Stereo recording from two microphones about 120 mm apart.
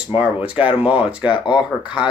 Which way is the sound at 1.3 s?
40° left (ahead or behind).